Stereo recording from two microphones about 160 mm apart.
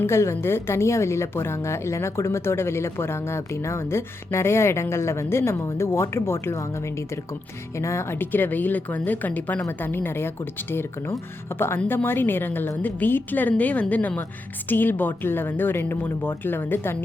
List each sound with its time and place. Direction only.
0.0 s a woman's voice: 15° left (ahead or behind)
7.8 s a woman's voice: 15° left (ahead or behind)